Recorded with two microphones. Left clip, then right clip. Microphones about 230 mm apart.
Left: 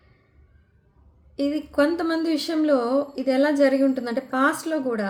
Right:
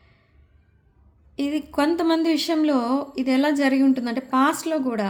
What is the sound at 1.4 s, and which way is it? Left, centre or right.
Speech, right.